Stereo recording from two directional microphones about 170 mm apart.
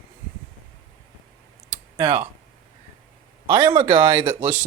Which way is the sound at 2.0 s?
30° right (ahead or behind).